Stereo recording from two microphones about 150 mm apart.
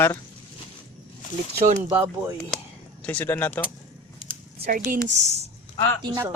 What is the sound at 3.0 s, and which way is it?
Speech, 15° left (ahead or behind).